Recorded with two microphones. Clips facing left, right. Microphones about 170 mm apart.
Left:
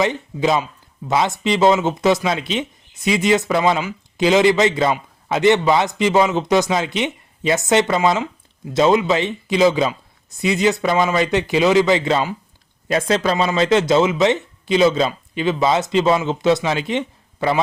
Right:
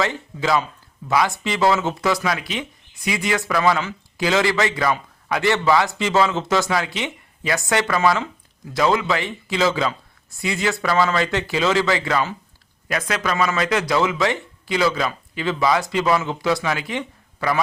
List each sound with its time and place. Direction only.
0.0 s speech: 20° left (ahead or behind)